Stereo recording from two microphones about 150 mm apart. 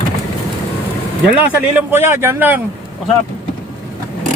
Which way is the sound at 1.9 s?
15° right (ahead or behind).